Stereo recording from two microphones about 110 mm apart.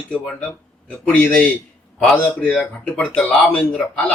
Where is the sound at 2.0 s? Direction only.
10° left (ahead or behind).